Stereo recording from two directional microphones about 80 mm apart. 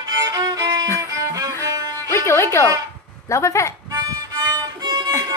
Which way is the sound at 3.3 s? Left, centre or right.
Left.